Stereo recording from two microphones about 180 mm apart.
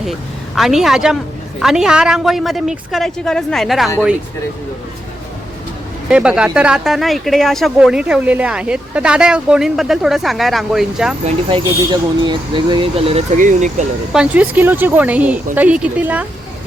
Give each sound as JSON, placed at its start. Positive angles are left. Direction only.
{"t": 0.0, "sound": "speech", "side_deg": 0}
{"t": 6.1, "sound": "speech", "side_deg": -5}
{"t": 11.4, "sound": "speech", "side_deg": -25}
{"t": 13.3, "sound": "speech", "side_deg": -45}
{"t": 14.1, "sound": "speech", "side_deg": -5}